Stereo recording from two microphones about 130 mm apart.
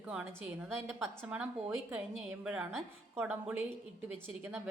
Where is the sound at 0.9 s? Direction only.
5° left (ahead or behind).